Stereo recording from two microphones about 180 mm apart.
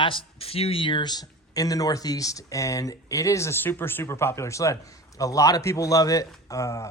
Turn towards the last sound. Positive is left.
turn(degrees=15)  # may be behind; listen again after turning